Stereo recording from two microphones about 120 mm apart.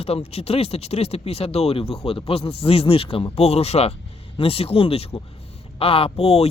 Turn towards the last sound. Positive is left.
turn(degrees=55)  # may be behind; listen again after turning